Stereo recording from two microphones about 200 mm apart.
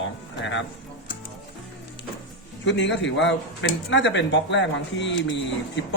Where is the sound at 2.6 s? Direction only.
65° left (ahead or behind).